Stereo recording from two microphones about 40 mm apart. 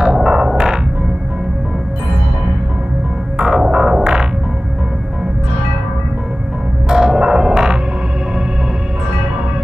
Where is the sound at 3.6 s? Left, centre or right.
Right.